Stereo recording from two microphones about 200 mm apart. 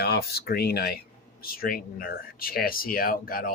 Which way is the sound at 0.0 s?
55° left (ahead or behind).